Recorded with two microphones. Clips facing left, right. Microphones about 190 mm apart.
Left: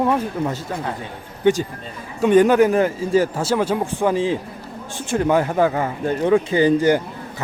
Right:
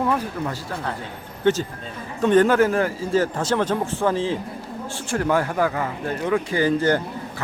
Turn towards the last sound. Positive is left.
turn(degrees=15)  # may be behind; listen again after turning